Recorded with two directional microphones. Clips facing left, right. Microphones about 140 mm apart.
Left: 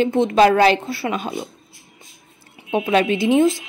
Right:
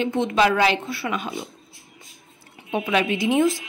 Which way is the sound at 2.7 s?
35° left (ahead or behind).